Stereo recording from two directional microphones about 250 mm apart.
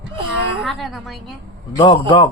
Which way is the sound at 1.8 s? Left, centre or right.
Centre.